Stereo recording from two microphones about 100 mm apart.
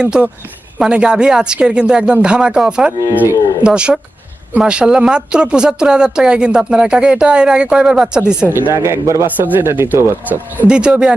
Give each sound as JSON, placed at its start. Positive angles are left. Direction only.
{"t": 0.0, "sound": "speech", "side_deg": -10}
{"t": 8.4, "sound": "speech", "side_deg": -20}
{"t": 10.7, "sound": "speech", "side_deg": -10}